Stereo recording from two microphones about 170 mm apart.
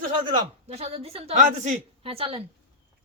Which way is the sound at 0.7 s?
40° right (ahead or behind).